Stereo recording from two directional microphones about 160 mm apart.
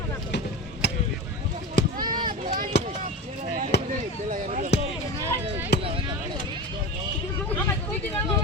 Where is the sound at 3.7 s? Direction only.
90° left.